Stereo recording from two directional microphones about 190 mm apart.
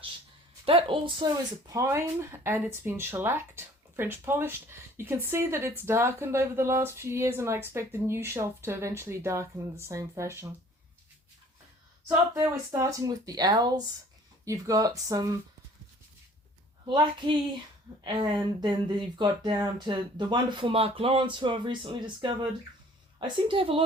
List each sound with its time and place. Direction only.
0.6 s speech: 30° right (ahead or behind)
12.0 s speech: 15° right (ahead or behind)
16.8 s speech: 25° right (ahead or behind)